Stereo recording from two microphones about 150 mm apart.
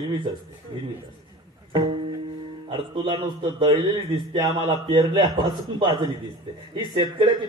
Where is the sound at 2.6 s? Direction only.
30° right (ahead or behind).